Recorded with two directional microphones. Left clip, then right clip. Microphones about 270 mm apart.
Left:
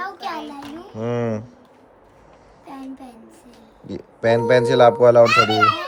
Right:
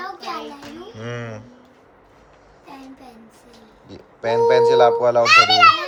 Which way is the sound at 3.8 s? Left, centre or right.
Left.